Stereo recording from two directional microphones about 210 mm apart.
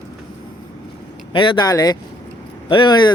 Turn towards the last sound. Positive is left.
turn(degrees=20)  # may be behind; listen again after turning